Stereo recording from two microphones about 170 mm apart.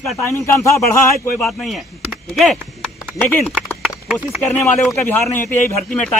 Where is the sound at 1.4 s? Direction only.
Centre (ahead or behind).